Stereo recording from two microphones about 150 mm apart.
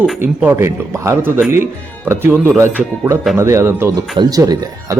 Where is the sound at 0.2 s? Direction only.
15° right (ahead or behind).